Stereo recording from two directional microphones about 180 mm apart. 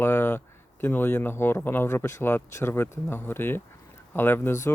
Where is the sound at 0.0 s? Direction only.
10° left (ahead or behind).